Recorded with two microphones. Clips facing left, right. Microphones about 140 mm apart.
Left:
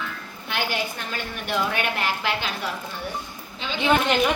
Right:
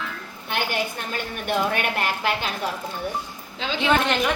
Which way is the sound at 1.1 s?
45° right (ahead or behind).